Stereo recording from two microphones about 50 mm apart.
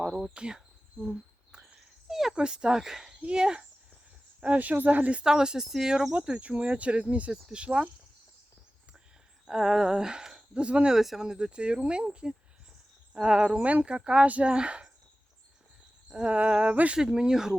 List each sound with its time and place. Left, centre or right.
0.0 s speech: centre
1.5 s dog: right
2.0 s a sound: centre
2.3 s speech: centre
4.4 s speech: right
5.2 s speech: centre
6.1 s speech: right
9.5 s speech: centre
10.9 s speech: centre
11.2 s speech: centre
16.0 s speech: right
17.0 s speech: centre